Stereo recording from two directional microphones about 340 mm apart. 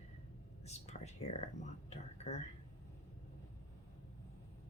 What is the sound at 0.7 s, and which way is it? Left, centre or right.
Speech, centre.